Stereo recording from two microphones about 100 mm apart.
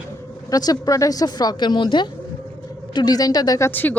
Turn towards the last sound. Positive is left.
turn(degrees=20)  # may be behind; listen again after turning